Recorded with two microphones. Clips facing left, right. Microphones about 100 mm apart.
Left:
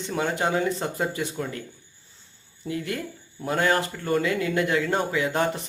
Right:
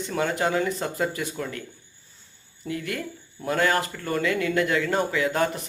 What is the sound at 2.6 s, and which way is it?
Speech, 25° left (ahead or behind).